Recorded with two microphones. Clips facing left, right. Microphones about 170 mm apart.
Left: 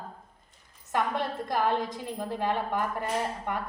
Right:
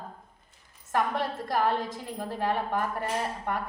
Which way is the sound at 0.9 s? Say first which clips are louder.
Right 1 dB; 20° left (ahead or behind).